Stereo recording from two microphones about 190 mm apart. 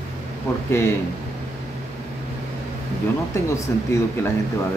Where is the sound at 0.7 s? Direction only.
15° left (ahead or behind).